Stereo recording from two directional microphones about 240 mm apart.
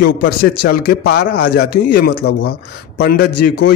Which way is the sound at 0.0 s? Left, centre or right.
Left.